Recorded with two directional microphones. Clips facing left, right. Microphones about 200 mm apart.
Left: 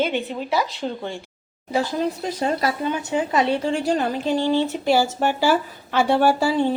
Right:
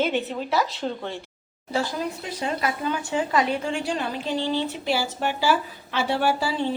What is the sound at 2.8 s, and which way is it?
A woman's voice, 20° left (ahead or behind).